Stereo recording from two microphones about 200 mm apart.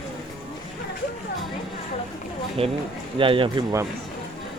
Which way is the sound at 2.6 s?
30° right (ahead or behind).